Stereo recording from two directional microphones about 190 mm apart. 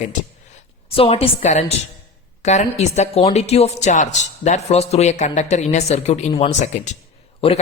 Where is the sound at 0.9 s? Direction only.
30° left (ahead or behind).